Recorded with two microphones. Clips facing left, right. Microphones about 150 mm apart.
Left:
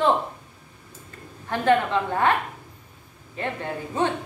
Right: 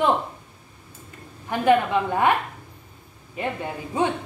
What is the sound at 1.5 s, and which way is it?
Speech, 15° right (ahead or behind).